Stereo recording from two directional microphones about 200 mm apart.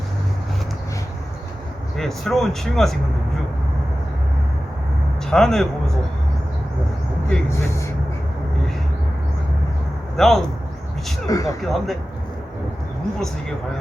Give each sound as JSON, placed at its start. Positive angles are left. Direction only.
{"t": 2.0, "sound": "speech", "side_deg": 0}
{"t": 5.3, "sound": "speech", "side_deg": 0}
{"t": 7.3, "sound": "speech", "side_deg": 15}
{"t": 10.2, "sound": "speech", "side_deg": 0}
{"t": 11.3, "sound": "speech", "side_deg": 15}
{"t": 11.6, "sound": "speech", "side_deg": 0}